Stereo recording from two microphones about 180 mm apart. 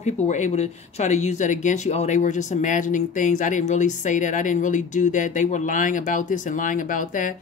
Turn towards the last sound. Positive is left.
turn(degrees=45)  # may be behind; listen again after turning